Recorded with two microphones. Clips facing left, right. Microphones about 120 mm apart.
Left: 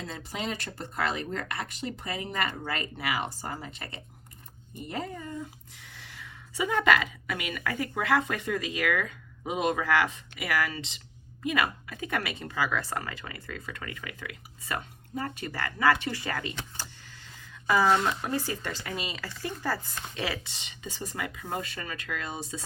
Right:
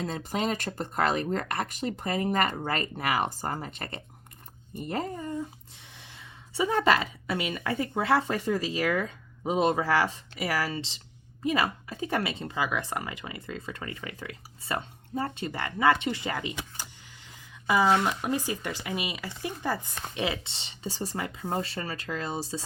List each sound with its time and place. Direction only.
0.0 s speech: 45° right (ahead or behind)
5.1 s speech: 35° right (ahead or behind); by 16.8 s 15° right (ahead or behind)
17.1 s a sound: 15° right (ahead or behind)
17.9 s speech: 10° right (ahead or behind); by 22.6 s 35° right (ahead or behind)